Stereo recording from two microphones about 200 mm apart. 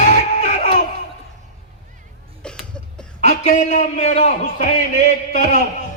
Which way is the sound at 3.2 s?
35° left (ahead or behind).